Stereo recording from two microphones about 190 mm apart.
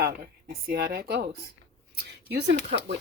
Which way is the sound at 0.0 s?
55° right (ahead or behind).